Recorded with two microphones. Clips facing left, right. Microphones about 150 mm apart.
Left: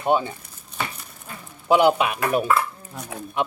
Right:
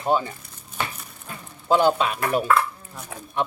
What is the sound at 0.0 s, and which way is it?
Speech, 15° left (ahead or behind).